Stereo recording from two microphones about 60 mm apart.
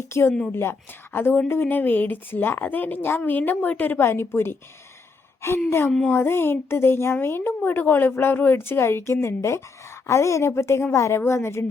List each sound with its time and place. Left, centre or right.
0.1 s a woman's voice: left
6.1 s a woman's voice: left